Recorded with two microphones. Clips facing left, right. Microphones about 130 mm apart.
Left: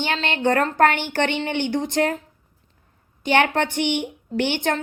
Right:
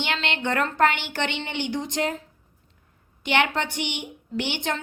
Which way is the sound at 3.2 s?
50° left (ahead or behind).